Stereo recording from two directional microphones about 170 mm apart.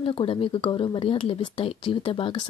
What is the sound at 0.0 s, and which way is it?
Speech, 30° left (ahead or behind).